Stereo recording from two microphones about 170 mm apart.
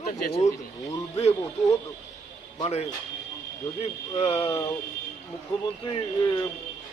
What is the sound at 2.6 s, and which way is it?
Speech, 40° left (ahead or behind).